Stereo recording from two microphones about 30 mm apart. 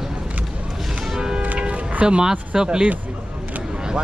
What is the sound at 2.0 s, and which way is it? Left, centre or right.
Speech, right.